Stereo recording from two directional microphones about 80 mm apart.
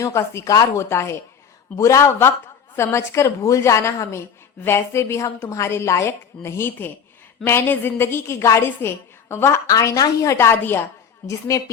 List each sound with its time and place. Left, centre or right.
0.0 s a woman's voice: left
9.6 s a woman's voice: left
11.3 s a woman's voice: left